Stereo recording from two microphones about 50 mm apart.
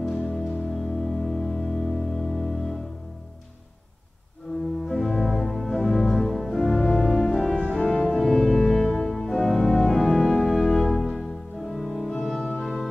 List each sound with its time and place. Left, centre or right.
0.1 s music: centre
4.5 s music: left
4.8 s organ: centre
6.0 s music: centre
7.8 s music: centre
8.2 s organ: centre